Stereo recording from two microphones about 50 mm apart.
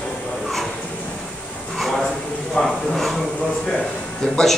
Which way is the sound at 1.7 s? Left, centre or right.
Centre.